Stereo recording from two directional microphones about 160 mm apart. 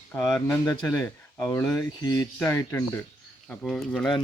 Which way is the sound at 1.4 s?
15° left (ahead or behind).